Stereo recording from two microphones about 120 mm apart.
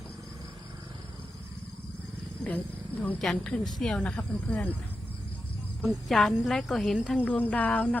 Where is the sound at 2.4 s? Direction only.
15° left (ahead or behind).